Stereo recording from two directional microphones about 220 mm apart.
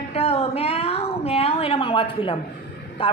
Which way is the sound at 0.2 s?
25° left (ahead or behind).